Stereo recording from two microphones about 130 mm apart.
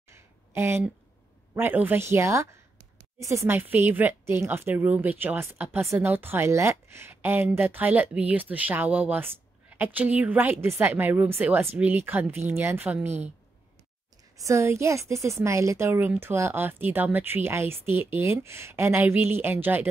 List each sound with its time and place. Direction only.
0.1 s a sound: 20° right (ahead or behind)
1.5 s a woman's voice: 15° right (ahead or behind)
14.4 s a woman's voice: 20° right (ahead or behind)